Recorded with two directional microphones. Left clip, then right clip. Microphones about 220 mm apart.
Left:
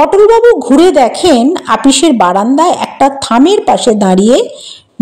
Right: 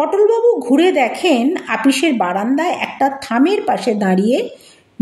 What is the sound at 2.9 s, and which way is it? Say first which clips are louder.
Speech: left 8 dB; 30° left (ahead or behind).